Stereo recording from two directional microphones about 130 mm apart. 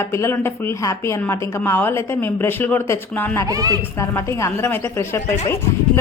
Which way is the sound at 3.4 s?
30° right (ahead or behind).